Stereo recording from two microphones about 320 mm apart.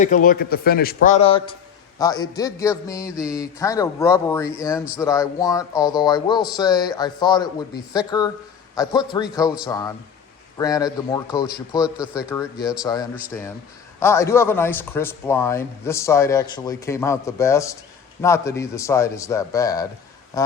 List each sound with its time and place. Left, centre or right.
0.0 s a man's voice: left
11.9 s speech: centre
12.3 s speech: centre